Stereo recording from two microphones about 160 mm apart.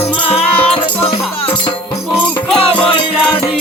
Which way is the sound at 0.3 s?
35° left (ahead or behind).